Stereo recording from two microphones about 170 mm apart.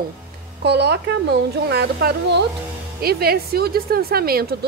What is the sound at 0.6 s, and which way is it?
A woman's voice, 80° right.